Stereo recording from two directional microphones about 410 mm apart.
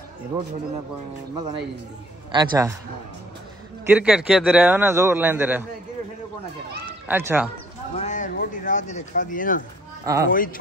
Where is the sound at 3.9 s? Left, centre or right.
Centre.